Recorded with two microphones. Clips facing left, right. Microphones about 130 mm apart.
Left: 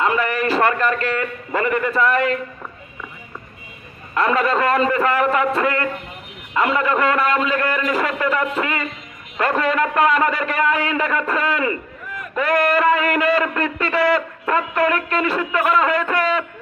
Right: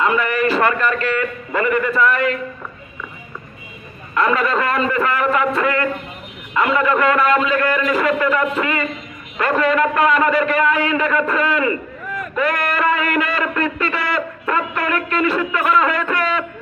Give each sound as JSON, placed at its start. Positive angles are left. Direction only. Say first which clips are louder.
{"t": 0.0, "sound": "a man's voice", "louder": "right 2 dB", "side_deg": 35}
{"t": 4.1, "sound": "a man's voice", "louder": "even", "side_deg": 40}